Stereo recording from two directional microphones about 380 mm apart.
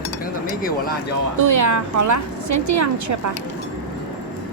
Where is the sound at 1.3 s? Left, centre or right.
Right.